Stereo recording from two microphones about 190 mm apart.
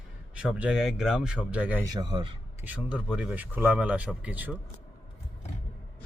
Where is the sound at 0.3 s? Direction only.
5° right (ahead or behind).